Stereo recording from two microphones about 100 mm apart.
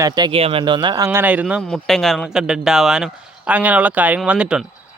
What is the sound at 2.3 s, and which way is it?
Speech, 5° right (ahead or behind).